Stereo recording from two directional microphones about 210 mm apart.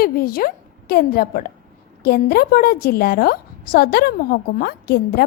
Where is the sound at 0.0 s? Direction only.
45° left (ahead or behind).